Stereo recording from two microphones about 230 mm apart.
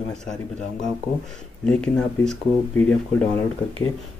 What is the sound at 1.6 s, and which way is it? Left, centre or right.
Speech, centre.